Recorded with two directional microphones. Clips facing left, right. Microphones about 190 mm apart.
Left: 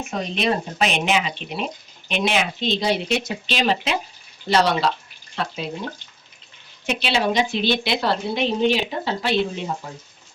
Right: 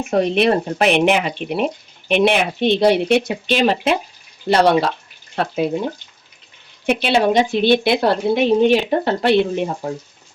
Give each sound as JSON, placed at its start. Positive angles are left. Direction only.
{"t": 0.1, "sound": "speech", "side_deg": -60}
{"t": 6.8, "sound": "speech", "side_deg": -55}